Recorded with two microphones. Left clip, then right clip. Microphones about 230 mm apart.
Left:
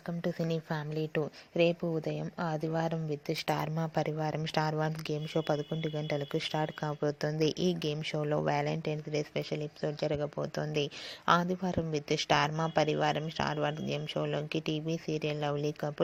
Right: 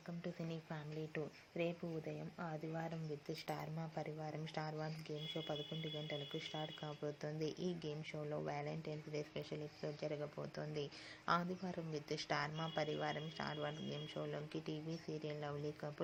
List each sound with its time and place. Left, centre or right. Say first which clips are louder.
0.2 s speech: left 15 dB; left